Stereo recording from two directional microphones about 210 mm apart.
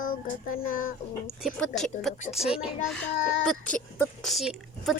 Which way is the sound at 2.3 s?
5° right (ahead or behind).